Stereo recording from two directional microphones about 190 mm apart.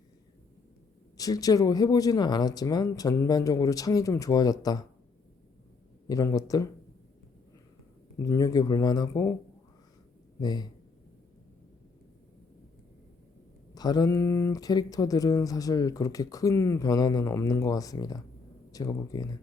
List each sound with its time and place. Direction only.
1.1 s speech: 20° left (ahead or behind)
6.1 s speech: 15° left (ahead or behind)
8.2 s speech: 20° left (ahead or behind)
10.4 s speech: 20° left (ahead or behind)
13.7 s speech: 20° left (ahead or behind)